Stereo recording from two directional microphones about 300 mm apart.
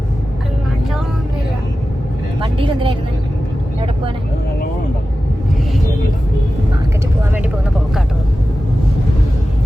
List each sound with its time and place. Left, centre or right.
2.4 s vehicle: centre